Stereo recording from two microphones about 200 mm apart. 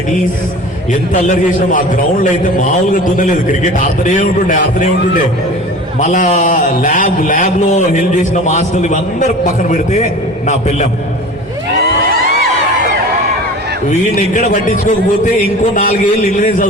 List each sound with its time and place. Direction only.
1.1 s a man's voice: 40° left (ahead or behind)
3.2 s a man's voice: 40° left (ahead or behind)
14.2 s a man's voice: 40° left (ahead or behind)